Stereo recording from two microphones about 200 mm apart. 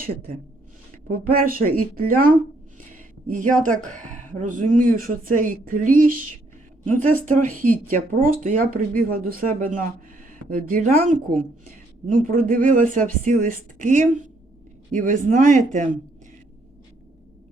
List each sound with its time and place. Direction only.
1.3 s speech: 45° right (ahead or behind)